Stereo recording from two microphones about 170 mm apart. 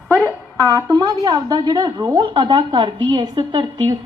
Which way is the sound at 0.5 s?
20° right (ahead or behind).